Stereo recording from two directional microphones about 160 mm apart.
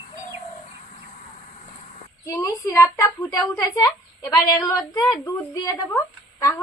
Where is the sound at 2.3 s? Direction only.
20° left (ahead or behind).